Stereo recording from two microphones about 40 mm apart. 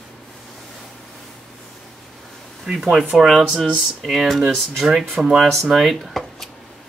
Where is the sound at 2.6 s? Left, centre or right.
Centre.